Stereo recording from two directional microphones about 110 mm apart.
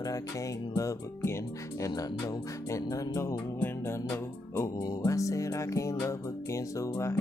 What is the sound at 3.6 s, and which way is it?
Music, 20° left (ahead or behind).